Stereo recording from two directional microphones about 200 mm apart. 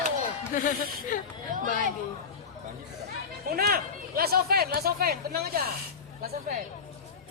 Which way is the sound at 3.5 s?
50° right (ahead or behind).